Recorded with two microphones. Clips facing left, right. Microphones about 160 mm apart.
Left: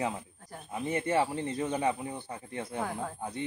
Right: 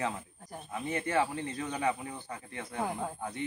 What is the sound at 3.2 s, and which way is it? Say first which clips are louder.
Speech: left 1 dB; 25° left (ahead or behind).